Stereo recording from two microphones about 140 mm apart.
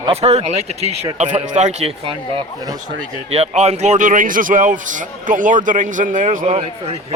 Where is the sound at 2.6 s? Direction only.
25° right (ahead or behind).